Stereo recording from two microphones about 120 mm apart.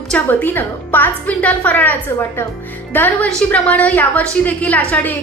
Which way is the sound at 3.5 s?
10° left (ahead or behind).